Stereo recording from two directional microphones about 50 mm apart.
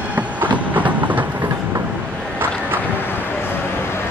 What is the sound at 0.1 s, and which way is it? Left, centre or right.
Train, right.